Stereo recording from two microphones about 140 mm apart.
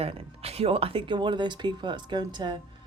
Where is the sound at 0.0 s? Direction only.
45° right (ahead or behind).